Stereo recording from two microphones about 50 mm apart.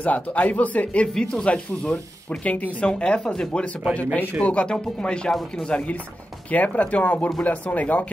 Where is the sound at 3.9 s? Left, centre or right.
Left.